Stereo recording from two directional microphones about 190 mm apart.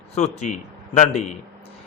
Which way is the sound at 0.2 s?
35° left (ahead or behind).